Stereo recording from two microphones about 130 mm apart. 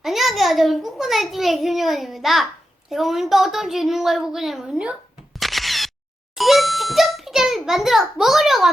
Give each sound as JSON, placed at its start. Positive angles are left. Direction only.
{"t": 0.0, "sound": "a child's voice", "side_deg": 0}